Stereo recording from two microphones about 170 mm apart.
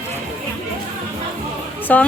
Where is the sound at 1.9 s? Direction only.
10° left (ahead or behind).